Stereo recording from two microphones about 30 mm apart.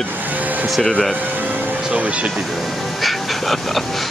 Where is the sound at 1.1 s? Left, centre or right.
Right.